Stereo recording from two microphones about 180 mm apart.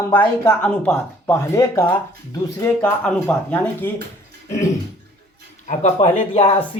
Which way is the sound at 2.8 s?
5° left (ahead or behind).